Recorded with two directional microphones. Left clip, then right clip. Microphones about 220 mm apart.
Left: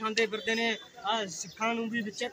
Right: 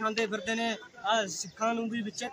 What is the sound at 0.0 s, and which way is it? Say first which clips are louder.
A man's voice: left 1 dB; 20° right (ahead or behind).